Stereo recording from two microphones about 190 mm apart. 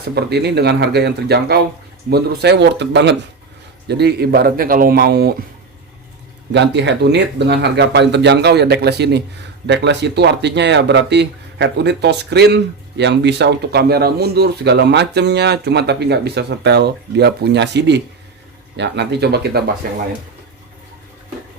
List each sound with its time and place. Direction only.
0.0 s speech: 60° right (ahead or behind)
6.5 s speech: 65° right (ahead or behind)